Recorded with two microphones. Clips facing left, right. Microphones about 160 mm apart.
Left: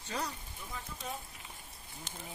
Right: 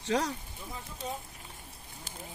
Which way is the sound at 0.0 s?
90° right.